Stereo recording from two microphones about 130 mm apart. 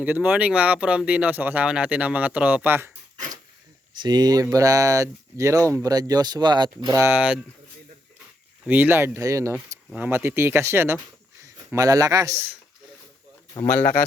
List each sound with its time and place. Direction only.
0.0 s speech: 15° right (ahead or behind)
3.9 s speech: 35° right (ahead or behind)
7.0 s speech: 15° right (ahead or behind)
8.6 s speech: 15° right (ahead or behind)
9.9 s speech: 15° right (ahead or behind)
13.5 s speech: 20° left (ahead or behind)